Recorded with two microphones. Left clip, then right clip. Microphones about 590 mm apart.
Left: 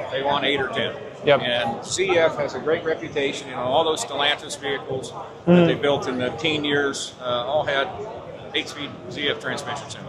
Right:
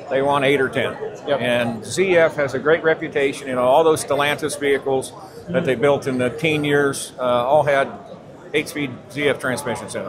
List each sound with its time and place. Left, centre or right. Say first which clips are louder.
0.1 s speech: right 5 dB; right
5.7 s speech: right 4 dB; right